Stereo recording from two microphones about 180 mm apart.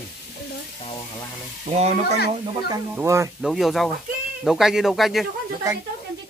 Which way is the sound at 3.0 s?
15° right (ahead or behind).